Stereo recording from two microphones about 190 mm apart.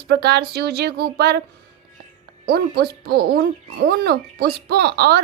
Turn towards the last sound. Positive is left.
turn(degrees=-60)  # may be behind; listen again after turning